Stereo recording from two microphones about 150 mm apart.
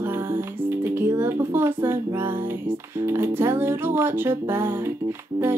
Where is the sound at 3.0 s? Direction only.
15° right (ahead or behind).